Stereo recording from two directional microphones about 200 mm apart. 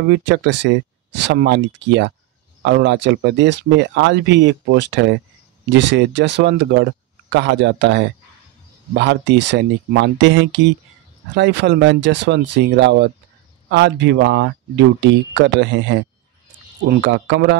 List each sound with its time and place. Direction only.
0.1 s speech: 65° right (ahead or behind)